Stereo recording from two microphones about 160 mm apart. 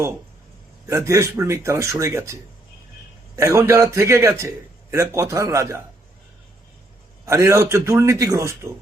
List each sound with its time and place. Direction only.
0.9 s a man's voice: 20° right (ahead or behind)
7.3 s a man's voice: 20° right (ahead or behind)